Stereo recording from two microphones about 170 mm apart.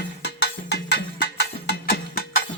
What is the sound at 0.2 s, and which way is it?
Music, 75° left (ahead or behind).